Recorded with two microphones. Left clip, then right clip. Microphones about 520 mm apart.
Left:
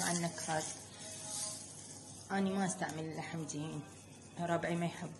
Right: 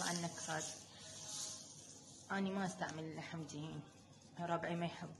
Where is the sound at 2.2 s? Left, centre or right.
Right.